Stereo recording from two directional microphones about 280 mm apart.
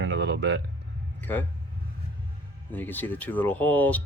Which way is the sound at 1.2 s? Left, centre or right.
Centre.